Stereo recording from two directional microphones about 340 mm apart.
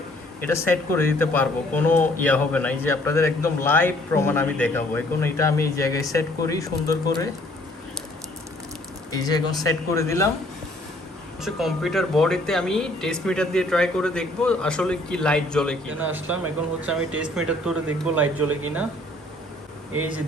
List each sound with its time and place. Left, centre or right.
0.4 s speech: centre
9.1 s speech: centre
11.4 s speech: centre
18.3 s speech: right
20.0 s speech: centre